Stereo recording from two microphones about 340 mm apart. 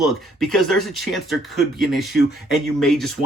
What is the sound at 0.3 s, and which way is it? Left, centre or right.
Speech, centre.